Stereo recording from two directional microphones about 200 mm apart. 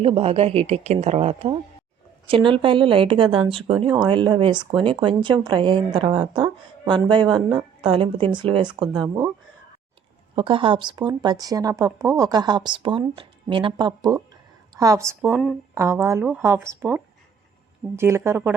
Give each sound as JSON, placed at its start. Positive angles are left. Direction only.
{"t": 0.0, "sound": "speech", "side_deg": -30}
{"t": 10.3, "sound": "speech", "side_deg": -25}